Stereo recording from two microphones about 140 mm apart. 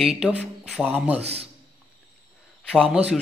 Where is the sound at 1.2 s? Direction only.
45° right (ahead or behind).